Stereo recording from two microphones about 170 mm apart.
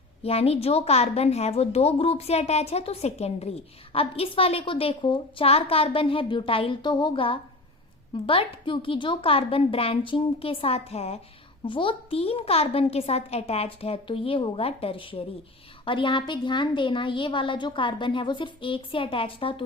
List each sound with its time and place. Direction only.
0.2 s a woman's voice: 35° left (ahead or behind)